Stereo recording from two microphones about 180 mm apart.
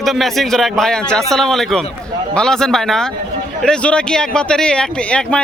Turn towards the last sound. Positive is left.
turn(degrees=5)  # may be behind; listen again after turning